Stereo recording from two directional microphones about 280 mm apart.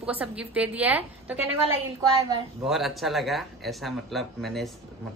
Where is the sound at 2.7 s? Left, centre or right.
Centre.